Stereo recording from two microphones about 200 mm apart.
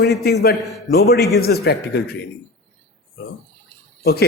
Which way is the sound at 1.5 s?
50° left (ahead or behind).